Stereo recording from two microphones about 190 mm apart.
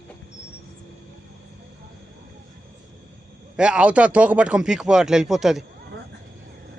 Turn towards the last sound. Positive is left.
turn(degrees=0)  # may be behind; listen again after turning